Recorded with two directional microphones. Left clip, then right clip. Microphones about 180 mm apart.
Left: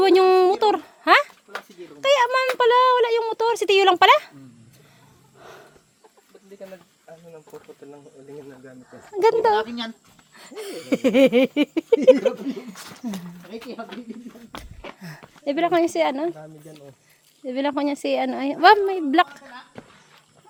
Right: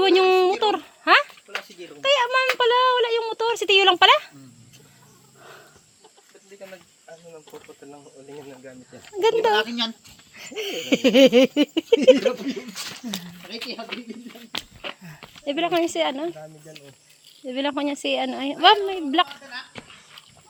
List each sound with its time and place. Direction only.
0.0 s a sound: 15° left (ahead or behind)
5.4 s wild animals: 15° left (ahead or behind)
7.3 s speech: 50° left (ahead or behind)
8.9 s speech: 15° left (ahead or behind)
9.6 s speech: 25° right (ahead or behind)
10.4 s a sound: 10° right (ahead or behind)
11.5 s speech: 5° left (ahead or behind)
13.7 s speech: 40° left (ahead or behind)
14.8 s a sound: 30° left (ahead or behind)
15.4 s speech: 25° left (ahead or behind)